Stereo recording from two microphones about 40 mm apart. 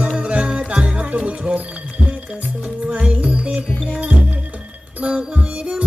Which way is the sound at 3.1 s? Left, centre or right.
Right.